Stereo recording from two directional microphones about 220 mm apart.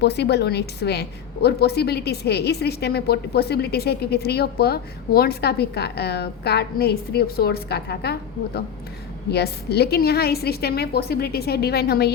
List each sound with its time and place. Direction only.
0.0 s a woman's voice: 50° left (ahead or behind)
9.3 s a woman's voice: 45° left (ahead or behind)